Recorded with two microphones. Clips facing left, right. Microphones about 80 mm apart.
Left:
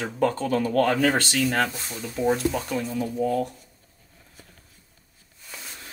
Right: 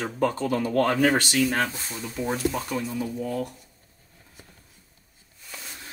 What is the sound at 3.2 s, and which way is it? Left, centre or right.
Speech, left.